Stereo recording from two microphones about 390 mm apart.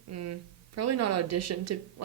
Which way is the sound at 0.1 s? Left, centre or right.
Right.